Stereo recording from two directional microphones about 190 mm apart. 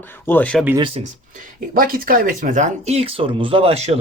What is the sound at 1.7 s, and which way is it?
A man's voice, 50° right (ahead or behind).